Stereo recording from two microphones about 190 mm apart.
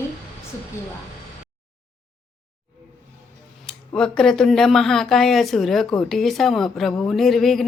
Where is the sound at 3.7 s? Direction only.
5° left (ahead or behind).